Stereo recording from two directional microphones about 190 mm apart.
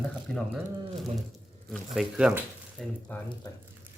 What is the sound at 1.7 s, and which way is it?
Speech, 5° right (ahead or behind).